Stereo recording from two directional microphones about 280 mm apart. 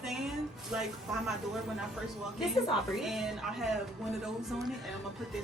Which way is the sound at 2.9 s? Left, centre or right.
Centre.